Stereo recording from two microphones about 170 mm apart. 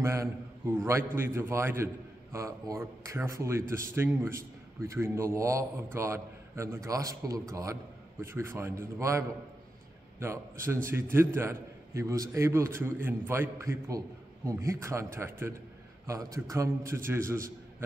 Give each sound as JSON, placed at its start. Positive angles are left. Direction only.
{"t": 0.0, "sound": "a man's voice", "side_deg": -15}